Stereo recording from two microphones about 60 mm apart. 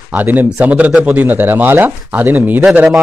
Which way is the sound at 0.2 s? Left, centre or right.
Right.